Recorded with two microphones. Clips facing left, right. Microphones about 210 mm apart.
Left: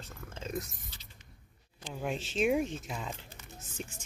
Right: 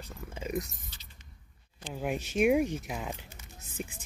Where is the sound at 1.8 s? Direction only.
5° right (ahead or behind).